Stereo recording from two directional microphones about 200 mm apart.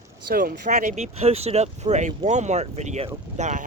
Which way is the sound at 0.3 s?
45° right (ahead or behind).